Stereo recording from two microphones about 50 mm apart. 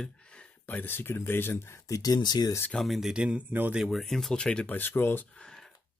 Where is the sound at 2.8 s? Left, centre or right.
Centre.